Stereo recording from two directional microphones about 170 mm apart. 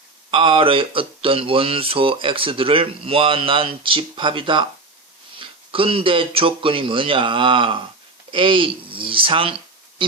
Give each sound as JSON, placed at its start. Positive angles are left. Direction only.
{"t": 0.3, "sound": "speech", "side_deg": -30}